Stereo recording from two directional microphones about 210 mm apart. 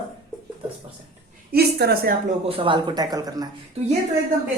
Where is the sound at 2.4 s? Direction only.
25° right (ahead or behind).